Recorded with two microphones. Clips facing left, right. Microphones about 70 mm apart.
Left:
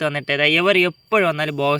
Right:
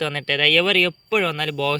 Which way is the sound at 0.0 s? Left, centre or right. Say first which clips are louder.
Left 3 dB; centre.